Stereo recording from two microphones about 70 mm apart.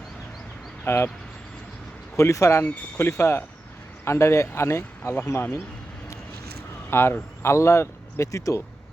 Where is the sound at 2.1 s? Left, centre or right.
Left.